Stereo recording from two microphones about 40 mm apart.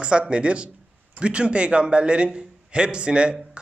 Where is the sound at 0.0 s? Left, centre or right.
Right.